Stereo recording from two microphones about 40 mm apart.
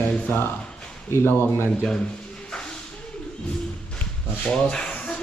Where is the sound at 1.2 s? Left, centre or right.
Left.